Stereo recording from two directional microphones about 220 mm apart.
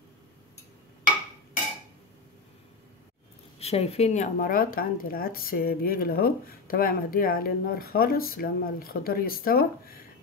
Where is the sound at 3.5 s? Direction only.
30° left (ahead or behind).